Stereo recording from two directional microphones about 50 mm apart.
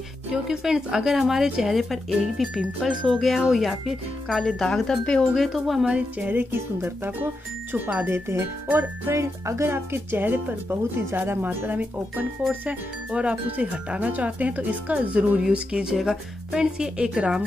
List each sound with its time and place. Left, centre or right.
0.3 s speech: centre
3.1 s speech: centre
4.4 s speech: centre
5.5 s speech: centre
6.1 s speech: right
6.5 s speech: right
7.7 s speech: right
8.1 s speech: right
8.6 s speech: right
9.1 s speech: right
9.7 s speech: right
11.7 s speech: right
12.6 s speech: right